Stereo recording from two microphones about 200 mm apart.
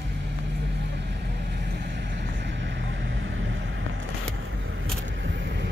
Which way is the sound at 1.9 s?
65° right (ahead or behind).